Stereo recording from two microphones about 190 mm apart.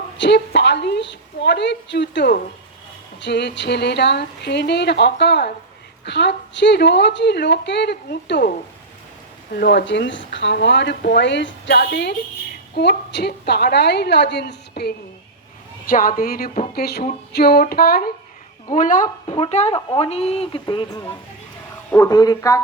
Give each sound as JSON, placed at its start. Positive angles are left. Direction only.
{"t": 0.2, "sound": "a woman's voice", "side_deg": 65}
{"t": 9.6, "sound": "a woman's voice", "side_deg": 65}
{"t": 15.9, "sound": "a sound", "side_deg": 50}
{"t": 19.0, "sound": "a woman's voice", "side_deg": 30}